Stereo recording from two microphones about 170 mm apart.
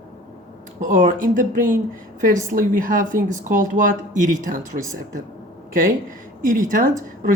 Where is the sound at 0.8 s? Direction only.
50° right (ahead or behind).